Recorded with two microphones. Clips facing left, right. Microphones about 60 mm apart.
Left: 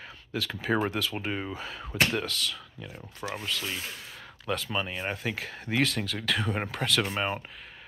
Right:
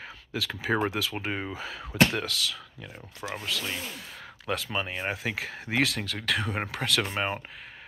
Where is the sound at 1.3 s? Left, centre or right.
Right.